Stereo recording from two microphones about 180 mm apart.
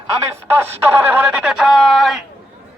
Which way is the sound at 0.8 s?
10° right (ahead or behind).